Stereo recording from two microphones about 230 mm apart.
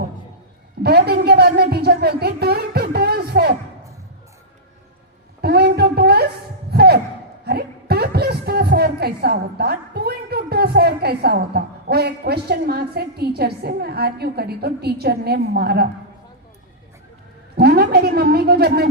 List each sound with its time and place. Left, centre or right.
0.8 s speech: right
5.4 s a sound: right
6.7 s music: right
7.4 s a woman's voice: right
17.6 s a woman's voice: right